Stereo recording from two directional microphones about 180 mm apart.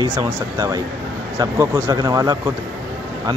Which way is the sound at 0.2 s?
20° right (ahead or behind).